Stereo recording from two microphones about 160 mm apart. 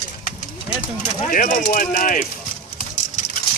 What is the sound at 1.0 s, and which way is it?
Speech, 55° left (ahead or behind).